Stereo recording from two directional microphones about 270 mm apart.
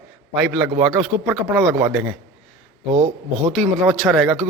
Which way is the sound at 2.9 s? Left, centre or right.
Right.